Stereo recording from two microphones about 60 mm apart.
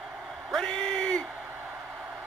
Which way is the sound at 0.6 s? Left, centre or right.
Centre.